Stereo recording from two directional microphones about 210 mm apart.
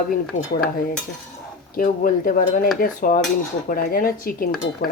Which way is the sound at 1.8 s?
40° left (ahead or behind).